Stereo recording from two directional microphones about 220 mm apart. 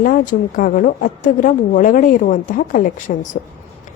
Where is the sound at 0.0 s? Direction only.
40° left (ahead or behind).